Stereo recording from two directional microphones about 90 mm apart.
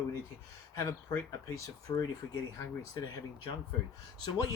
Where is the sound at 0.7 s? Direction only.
35° left (ahead or behind).